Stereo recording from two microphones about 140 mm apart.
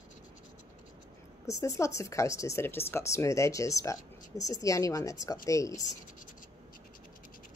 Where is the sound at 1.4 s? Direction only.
20° left (ahead or behind).